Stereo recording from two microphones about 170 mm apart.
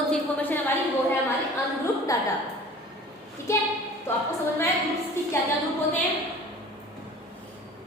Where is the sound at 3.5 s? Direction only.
15° left (ahead or behind).